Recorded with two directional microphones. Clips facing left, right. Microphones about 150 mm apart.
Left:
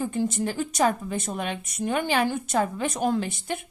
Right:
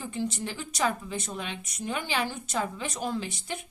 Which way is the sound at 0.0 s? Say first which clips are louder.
Left 6 dB; 50° left (ahead or behind).